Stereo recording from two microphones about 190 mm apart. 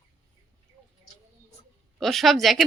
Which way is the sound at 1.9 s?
Centre (ahead or behind).